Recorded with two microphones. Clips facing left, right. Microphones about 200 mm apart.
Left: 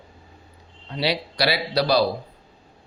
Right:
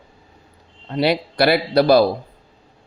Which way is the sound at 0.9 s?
50° right (ahead or behind).